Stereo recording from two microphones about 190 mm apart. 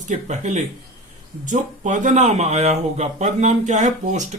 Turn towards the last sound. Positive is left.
turn(degrees=-40)  # may be behind; listen again after turning